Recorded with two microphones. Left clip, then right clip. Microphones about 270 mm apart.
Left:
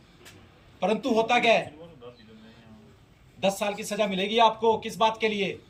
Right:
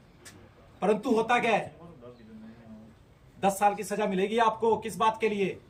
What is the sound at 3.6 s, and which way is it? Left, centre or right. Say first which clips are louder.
A man's voice: right 1 dB; centre.